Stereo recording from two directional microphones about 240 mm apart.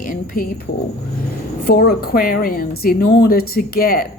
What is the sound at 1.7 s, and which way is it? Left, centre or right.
Speech, left.